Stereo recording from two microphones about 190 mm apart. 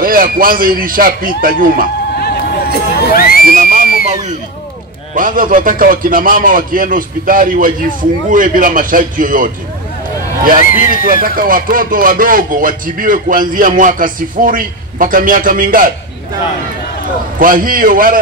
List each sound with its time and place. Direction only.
0.0 s speech: 50° right (ahead or behind)
2.1 s a sound: 55° left (ahead or behind)
2.9 s speech: 50° left (ahead or behind)
3.4 s speech: 45° right (ahead or behind)
5.1 s speech: 45° right (ahead or behind)
11.1 s speech: 50° right (ahead or behind)
17.4 s speech: 45° right (ahead or behind)